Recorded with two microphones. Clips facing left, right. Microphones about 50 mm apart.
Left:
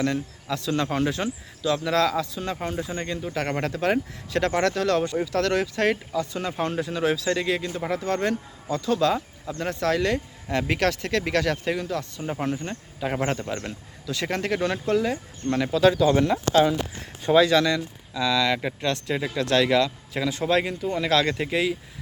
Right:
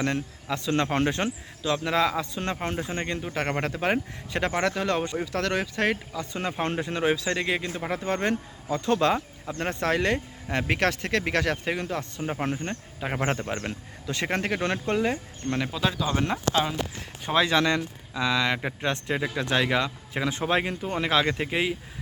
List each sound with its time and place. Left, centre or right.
0.0 s speech: right
1.7 s speech: centre
2.3 s speech: right
2.8 s speech: right
7.0 s speech: centre
11.8 s speech: right
12.2 s speech: centre
15.4 s speech: centre
17.4 s speech: right